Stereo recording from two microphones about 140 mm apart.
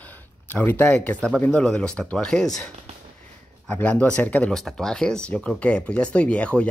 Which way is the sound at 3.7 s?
10° left (ahead or behind).